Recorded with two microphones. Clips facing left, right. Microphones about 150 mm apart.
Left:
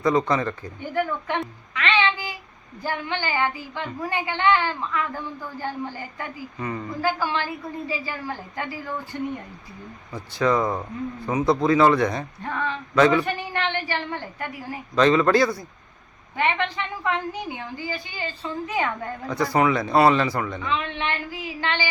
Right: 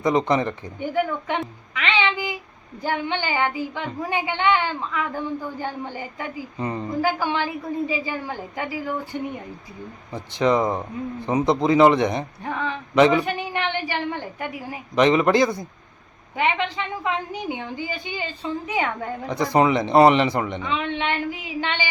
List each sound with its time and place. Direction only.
0.0 s a man's voice: 20° right (ahead or behind)
10.1 s a woman's voice: 20° right (ahead or behind)